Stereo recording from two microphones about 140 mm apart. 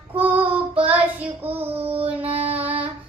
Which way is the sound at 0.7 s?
40° right (ahead or behind).